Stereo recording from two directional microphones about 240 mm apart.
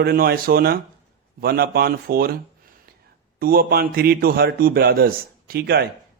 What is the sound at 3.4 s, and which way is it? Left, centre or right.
A man's voice, right.